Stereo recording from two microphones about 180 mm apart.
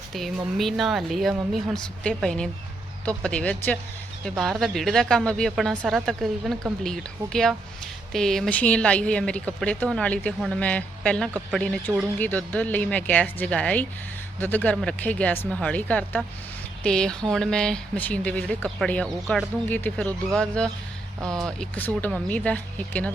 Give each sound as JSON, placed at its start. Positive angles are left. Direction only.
{"t": 0.1, "sound": "speech", "side_deg": 0}